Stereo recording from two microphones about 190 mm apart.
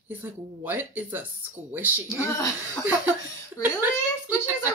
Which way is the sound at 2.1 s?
15° left (ahead or behind).